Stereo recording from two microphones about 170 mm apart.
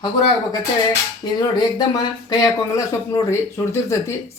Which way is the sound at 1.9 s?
20° left (ahead or behind).